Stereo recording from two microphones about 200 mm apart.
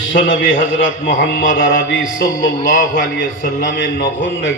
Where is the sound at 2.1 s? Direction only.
40° left (ahead or behind).